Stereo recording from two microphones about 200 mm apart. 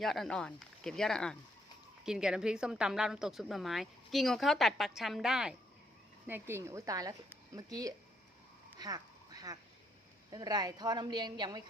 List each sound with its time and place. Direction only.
0.0 s a woman's voice: centre (ahead or behind); by 7.9 s 15° right (ahead or behind)
8.8 s a sound: 20° right (ahead or behind)
10.2 s a woman's voice: 20° right (ahead or behind)